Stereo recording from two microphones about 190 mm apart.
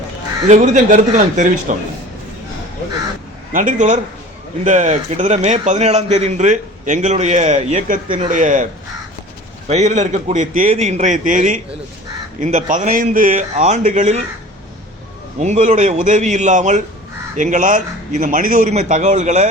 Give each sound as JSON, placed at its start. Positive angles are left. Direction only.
{"t": 0.4, "sound": "a man's voice", "side_deg": -40}
{"t": 3.5, "sound": "a man's voice", "side_deg": -45}
{"t": 9.6, "sound": "a man's voice", "side_deg": -40}
{"t": 15.4, "sound": "a man's voice", "side_deg": -40}